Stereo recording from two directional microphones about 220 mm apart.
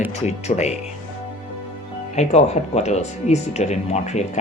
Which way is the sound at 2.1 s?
30° left (ahead or behind).